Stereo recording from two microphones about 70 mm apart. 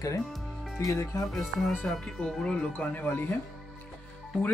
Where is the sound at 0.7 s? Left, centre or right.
Left.